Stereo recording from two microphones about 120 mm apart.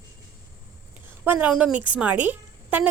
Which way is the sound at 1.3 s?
10° right (ahead or behind).